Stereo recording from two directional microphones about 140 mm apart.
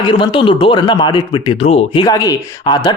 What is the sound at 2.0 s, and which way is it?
Speech, 25° left (ahead or behind).